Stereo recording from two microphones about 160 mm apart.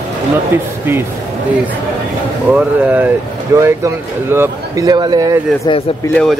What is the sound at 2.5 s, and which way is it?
Speech, 10° right (ahead or behind).